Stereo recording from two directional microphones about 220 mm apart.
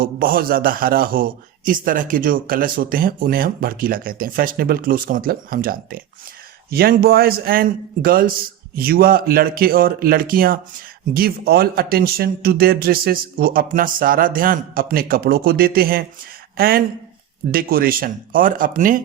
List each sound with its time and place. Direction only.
0.0 s a man's voice: 40° right (ahead or behind)